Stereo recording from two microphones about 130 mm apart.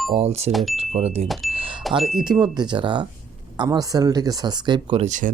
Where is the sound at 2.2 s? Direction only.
35° right (ahead or behind).